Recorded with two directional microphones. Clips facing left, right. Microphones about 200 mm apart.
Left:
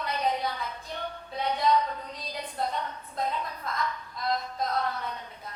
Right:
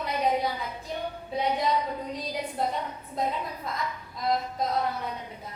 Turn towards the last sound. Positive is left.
turn(degrees=-20)  # may be behind; listen again after turning